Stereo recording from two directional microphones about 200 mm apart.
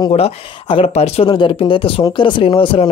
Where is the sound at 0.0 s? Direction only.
30° left (ahead or behind).